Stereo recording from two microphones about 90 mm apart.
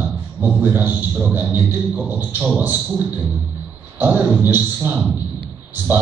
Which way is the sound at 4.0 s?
20° right (ahead or behind).